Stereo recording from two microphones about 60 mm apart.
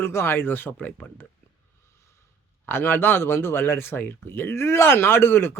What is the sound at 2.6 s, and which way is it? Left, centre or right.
Speech, left.